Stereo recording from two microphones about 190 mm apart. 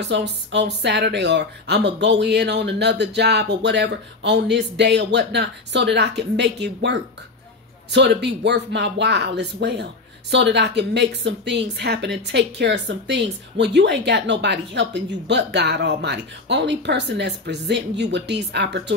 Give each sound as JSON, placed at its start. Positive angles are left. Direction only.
{"t": 0.0, "sound": "a woman's voice", "side_deg": -65}